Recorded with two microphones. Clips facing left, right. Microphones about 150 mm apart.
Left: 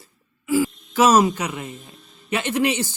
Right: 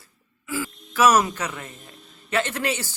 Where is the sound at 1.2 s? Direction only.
15° left (ahead or behind).